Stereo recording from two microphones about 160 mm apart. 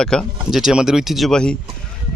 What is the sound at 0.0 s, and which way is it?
Speech, 5° left (ahead or behind).